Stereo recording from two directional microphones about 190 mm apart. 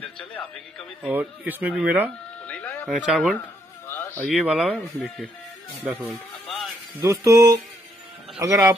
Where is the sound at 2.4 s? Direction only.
10° left (ahead or behind).